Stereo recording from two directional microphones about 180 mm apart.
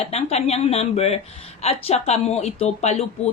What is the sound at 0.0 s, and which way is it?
Speech, 35° left (ahead or behind).